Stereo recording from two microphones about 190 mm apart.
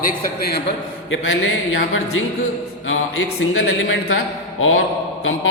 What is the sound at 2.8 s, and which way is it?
A man's voice, 90° left.